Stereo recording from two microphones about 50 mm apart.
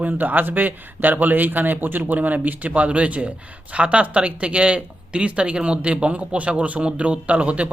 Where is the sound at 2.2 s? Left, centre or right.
Right.